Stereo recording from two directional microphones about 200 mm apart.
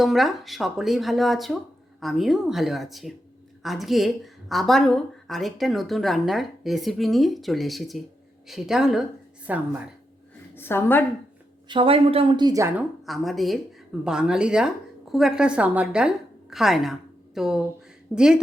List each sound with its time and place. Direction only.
0.0 s speech: centre (ahead or behind)
10.5 s a woman's voice: 10° left (ahead or behind)
11.7 s a woman's voice: 25° right (ahead or behind)
13.1 s a woman's voice: centre (ahead or behind)